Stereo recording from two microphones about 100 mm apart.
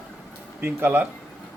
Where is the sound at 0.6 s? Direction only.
20° right (ahead or behind).